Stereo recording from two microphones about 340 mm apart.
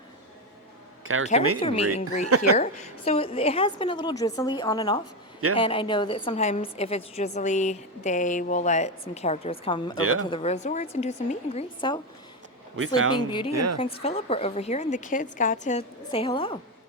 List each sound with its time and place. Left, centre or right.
1.0 s speech: right
1.5 s a woman's voice: centre
10.0 s speech: right
10.2 s a woman's voice: centre
13.1 s a woman's voice: centre
13.5 s a woman's voice: right
13.7 s a woman's voice: centre